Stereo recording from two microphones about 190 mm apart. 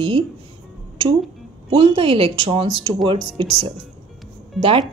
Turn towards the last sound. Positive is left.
turn(degrees=0)  # may be behind; listen again after turning